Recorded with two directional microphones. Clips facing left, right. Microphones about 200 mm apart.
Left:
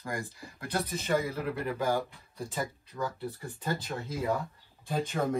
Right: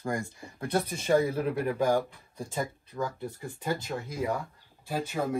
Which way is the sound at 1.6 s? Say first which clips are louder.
Right 4 dB; 15° right (ahead or behind).